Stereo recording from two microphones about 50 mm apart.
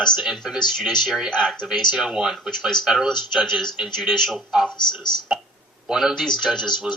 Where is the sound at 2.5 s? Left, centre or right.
Centre.